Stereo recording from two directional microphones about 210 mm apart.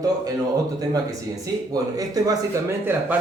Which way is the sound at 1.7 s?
15° right (ahead or behind).